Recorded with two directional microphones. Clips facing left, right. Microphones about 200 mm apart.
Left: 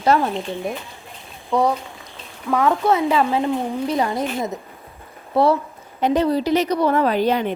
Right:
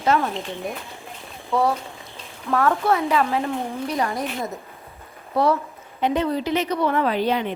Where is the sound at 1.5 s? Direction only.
15° left (ahead or behind).